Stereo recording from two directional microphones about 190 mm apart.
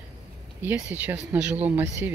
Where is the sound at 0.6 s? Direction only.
10° right (ahead or behind).